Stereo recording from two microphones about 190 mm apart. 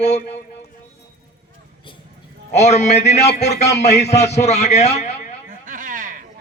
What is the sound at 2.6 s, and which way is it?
A man's voice, 35° left (ahead or behind).